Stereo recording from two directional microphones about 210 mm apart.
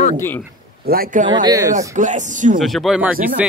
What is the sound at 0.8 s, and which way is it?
Speech, 45° right (ahead or behind).